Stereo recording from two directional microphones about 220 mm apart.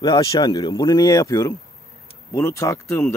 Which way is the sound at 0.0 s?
20° left (ahead or behind).